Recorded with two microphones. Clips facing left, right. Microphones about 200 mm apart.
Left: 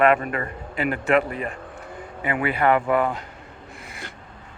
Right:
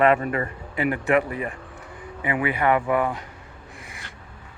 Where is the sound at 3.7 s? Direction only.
15° right (ahead or behind).